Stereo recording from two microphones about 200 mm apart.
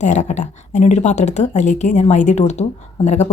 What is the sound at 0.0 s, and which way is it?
Speech, 35° left (ahead or behind).